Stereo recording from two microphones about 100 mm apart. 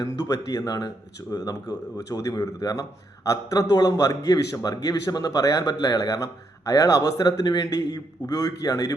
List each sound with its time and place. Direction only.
0.3 s a man's voice: 40° left (ahead or behind)